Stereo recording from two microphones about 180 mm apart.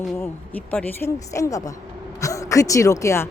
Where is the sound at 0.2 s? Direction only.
10° left (ahead or behind).